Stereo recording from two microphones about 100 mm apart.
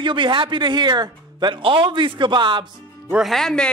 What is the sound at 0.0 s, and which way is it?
Speech, 55° right (ahead or behind).